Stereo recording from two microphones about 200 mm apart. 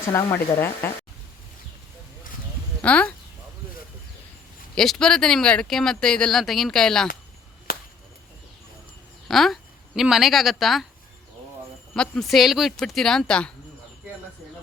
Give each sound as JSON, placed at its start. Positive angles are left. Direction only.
{"t": 0.1, "sound": "speech", "side_deg": 15}
{"t": 2.8, "sound": "speech", "side_deg": 5}
{"t": 4.7, "sound": "speech", "side_deg": 5}
{"t": 7.7, "sound": "chop", "side_deg": 45}
{"t": 9.2, "sound": "a woman's voice", "side_deg": 0}
{"t": 11.9, "sound": "speech", "side_deg": 0}